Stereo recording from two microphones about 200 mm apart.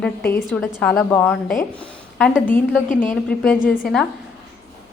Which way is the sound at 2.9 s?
40° left (ahead or behind).